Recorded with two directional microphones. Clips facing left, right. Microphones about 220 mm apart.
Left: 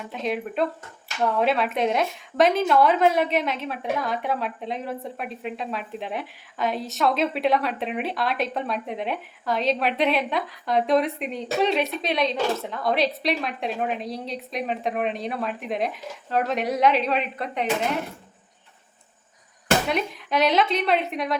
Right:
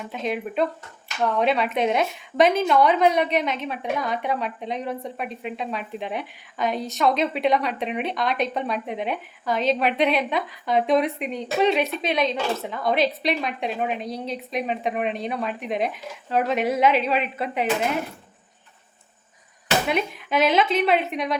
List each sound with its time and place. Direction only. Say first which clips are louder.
0.0 s speech: even; centre (ahead or behind)
19.9 s speech: right 1 dB; centre (ahead or behind)